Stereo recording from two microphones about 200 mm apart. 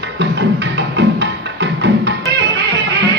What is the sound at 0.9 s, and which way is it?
Music, 60° right (ahead or behind).